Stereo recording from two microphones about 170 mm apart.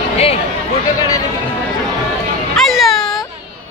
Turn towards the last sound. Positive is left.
turn(degrees=0)  # may be behind; listen again after turning